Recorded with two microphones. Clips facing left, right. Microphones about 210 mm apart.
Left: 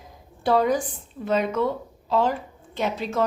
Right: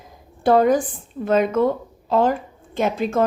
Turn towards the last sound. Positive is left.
turn(degrees=-50)  # may be behind; listen again after turning